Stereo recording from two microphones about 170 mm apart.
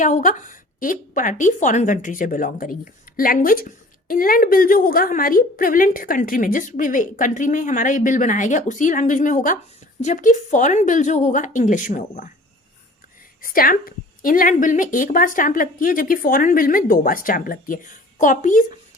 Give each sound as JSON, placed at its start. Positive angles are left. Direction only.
{"t": 0.0, "sound": "a woman's voice", "side_deg": 45}
{"t": 13.4, "sound": "a woman's voice", "side_deg": 55}